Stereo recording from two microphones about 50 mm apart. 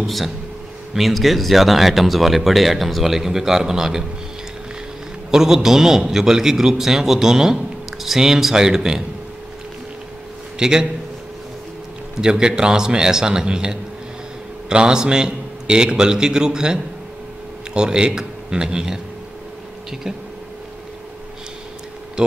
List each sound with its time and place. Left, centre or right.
0.0 s a man's voice: centre
5.3 s a man's voice: centre
10.6 s a man's voice: centre
12.2 s a man's voice: centre